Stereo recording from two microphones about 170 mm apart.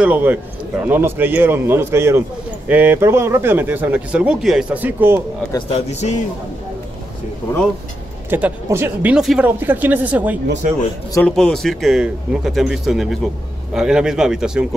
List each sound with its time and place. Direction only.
0.0 s speech: 10° right (ahead or behind)
5.7 s speech: 40° left (ahead or behind)
8.3 s speech: 10° right (ahead or behind)
10.6 s a man's voice: 45° right (ahead or behind)
11.1 s a man's voice: 5° left (ahead or behind)